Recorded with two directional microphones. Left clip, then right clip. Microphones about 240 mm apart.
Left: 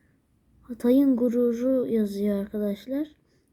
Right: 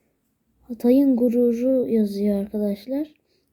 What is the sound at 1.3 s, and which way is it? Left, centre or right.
Speech, centre.